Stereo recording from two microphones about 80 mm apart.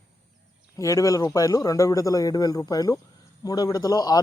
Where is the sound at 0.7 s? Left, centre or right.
Left.